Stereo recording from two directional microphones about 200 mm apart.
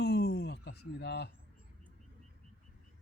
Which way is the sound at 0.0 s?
55° left (ahead or behind).